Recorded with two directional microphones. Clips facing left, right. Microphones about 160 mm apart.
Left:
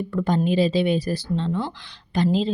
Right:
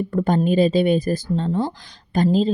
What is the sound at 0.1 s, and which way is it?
A woman's voice, 50° right (ahead or behind).